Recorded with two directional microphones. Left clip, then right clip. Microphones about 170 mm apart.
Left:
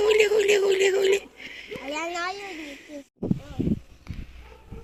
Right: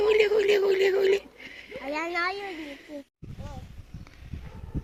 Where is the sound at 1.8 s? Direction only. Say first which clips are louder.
Right 1 dB; 60° left (ahead or behind).